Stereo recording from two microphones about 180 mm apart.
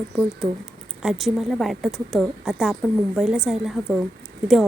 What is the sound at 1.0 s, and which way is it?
A woman's voice, centre (ahead or behind).